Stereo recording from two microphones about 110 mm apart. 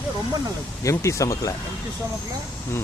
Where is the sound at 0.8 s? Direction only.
25° left (ahead or behind).